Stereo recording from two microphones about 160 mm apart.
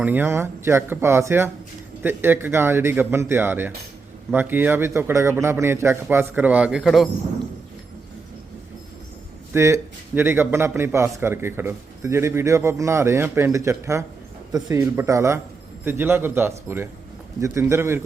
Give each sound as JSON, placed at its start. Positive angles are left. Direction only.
{"t": 0.0, "sound": "a man's voice", "side_deg": -10}
{"t": 9.5, "sound": "a man's voice", "side_deg": -15}